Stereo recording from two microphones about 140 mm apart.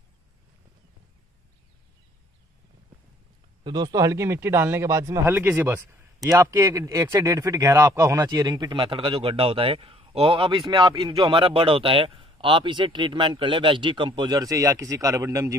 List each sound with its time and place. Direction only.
3.6 s speech: 30° right (ahead or behind)